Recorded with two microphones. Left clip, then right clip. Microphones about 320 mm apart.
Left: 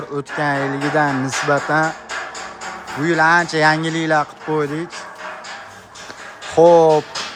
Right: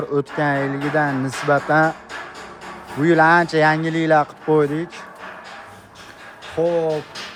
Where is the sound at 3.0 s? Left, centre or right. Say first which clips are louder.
Even; centre.